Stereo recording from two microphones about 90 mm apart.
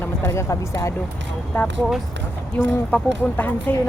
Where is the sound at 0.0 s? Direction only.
30° left (ahead or behind).